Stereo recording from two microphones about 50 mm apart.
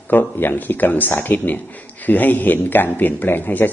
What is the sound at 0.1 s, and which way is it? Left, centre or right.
A man's voice, left.